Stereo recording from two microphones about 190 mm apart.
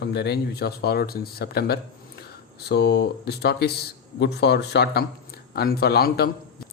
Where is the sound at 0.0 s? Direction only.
60° left (ahead or behind).